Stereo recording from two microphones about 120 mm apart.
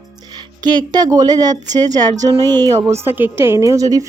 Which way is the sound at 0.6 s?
35° right (ahead or behind).